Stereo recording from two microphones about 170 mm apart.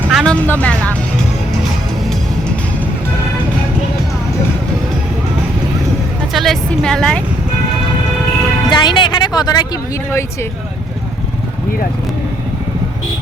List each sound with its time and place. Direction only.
0.1 s music: centre (ahead or behind)
0.4 s speech: 10° left (ahead or behind)
6.3 s a woman's voice: centre (ahead or behind)
8.7 s a woman's voice: 25° left (ahead or behind)